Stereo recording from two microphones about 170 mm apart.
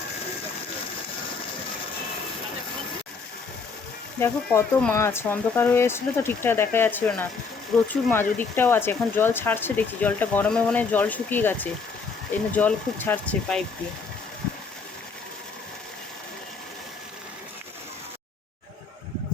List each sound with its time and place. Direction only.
4.2 s speech: 10° left (ahead or behind)